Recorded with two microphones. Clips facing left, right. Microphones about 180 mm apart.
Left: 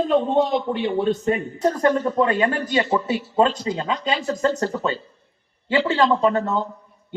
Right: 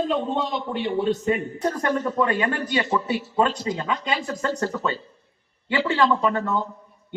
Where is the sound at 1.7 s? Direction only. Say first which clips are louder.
Left 5 dB; 30° left (ahead or behind).